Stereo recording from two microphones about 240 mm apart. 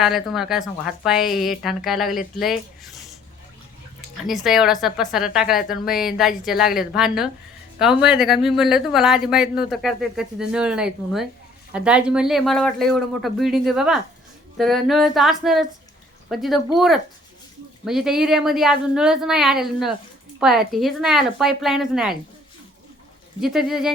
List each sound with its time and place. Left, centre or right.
0.0 s speech: centre
4.3 s speech: centre
23.4 s speech: centre